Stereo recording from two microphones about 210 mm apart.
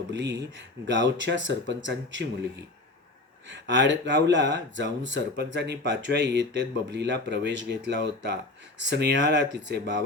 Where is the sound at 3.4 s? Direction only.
55° right (ahead or behind).